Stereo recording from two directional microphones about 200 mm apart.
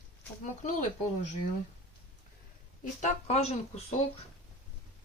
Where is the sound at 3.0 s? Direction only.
30° left (ahead or behind).